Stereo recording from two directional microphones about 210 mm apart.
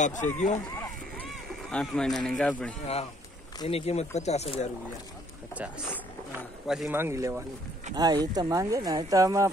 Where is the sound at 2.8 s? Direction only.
30° left (ahead or behind).